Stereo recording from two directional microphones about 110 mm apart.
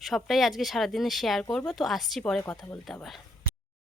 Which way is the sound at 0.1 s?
Centre (ahead or behind).